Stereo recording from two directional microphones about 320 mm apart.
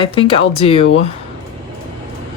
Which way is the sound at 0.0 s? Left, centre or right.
Centre.